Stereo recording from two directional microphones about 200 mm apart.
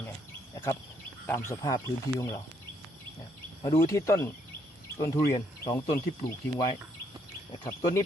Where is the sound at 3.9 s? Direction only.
15° left (ahead or behind).